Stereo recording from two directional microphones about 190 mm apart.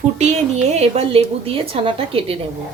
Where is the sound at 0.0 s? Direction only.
35° right (ahead or behind).